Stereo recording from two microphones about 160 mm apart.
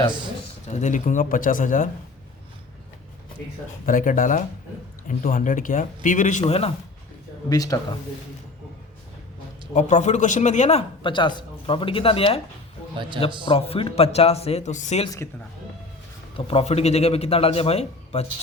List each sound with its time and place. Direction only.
0.7 s speech: 50° left (ahead or behind)
3.8 s speech: 55° left (ahead or behind)
7.5 s speech: 20° left (ahead or behind)
9.7 s a man's voice: 45° left (ahead or behind)
13.5 s a man's voice: 35° left (ahead or behind)
16.5 s a man's voice: 40° left (ahead or behind)